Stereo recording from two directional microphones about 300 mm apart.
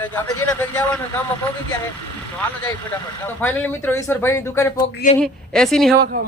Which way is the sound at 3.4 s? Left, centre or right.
Centre.